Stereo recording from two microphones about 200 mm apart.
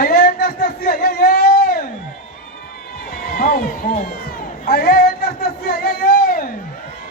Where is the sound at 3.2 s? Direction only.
45° left (ahead or behind).